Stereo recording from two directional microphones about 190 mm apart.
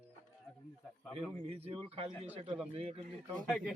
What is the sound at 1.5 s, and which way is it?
Speech, 30° right (ahead or behind).